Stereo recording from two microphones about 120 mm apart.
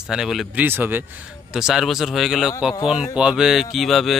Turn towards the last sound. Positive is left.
turn(degrees=0)  # may be behind; listen again after turning